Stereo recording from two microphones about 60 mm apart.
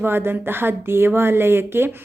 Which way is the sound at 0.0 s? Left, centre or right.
Right.